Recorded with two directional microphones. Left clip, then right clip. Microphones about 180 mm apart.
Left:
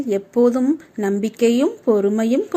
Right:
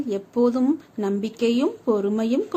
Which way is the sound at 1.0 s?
15° left (ahead or behind).